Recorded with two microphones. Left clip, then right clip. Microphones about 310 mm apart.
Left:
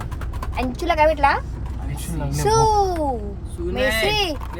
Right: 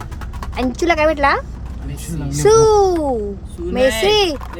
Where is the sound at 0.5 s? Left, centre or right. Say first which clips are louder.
Right 5 dB; right.